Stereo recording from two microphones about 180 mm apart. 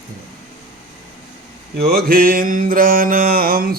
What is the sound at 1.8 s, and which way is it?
Mantra, 60° right (ahead or behind).